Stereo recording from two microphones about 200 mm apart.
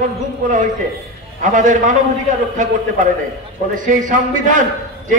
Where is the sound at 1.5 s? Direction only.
40° right (ahead or behind).